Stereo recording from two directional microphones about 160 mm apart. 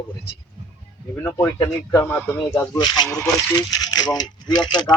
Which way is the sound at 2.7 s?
25° left (ahead or behind).